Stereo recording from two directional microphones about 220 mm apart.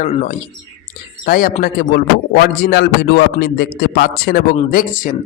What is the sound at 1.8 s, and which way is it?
A man's voice, 50° left (ahead or behind).